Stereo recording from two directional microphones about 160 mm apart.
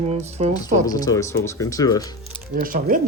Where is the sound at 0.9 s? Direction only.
25° left (ahead or behind).